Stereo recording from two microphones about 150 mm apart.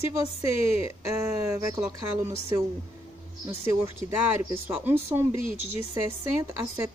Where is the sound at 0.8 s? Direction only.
20° right (ahead or behind).